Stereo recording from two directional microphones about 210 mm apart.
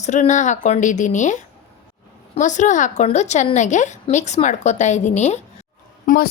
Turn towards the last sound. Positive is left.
turn(degrees=40)  # may be behind; listen again after turning